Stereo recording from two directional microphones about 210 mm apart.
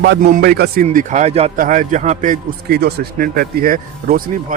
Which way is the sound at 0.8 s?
35° right (ahead or behind).